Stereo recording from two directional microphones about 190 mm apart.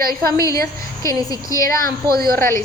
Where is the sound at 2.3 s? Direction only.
15° left (ahead or behind).